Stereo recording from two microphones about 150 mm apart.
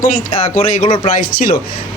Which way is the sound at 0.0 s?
45° left (ahead or behind).